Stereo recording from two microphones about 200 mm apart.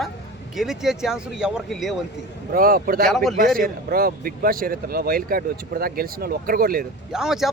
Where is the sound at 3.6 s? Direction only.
45° right (ahead or behind).